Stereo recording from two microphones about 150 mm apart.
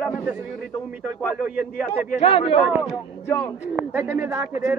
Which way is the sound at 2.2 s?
40° left (ahead or behind).